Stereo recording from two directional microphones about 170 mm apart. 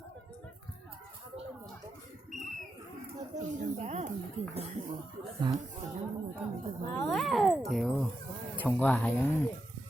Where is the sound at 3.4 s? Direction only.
45° right (ahead or behind).